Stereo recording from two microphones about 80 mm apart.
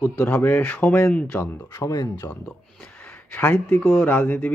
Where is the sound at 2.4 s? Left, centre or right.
Centre.